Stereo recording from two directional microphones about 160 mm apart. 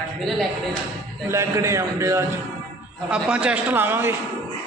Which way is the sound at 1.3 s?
20° right (ahead or behind).